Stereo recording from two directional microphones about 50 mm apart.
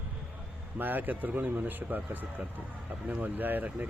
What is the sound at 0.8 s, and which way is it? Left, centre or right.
Speech, right.